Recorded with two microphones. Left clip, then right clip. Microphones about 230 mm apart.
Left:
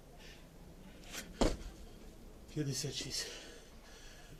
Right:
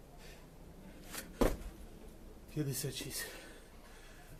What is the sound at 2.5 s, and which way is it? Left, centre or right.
Speech, centre.